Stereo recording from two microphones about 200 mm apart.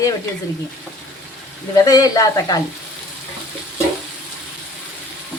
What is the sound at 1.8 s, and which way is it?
Speech, 20° left (ahead or behind).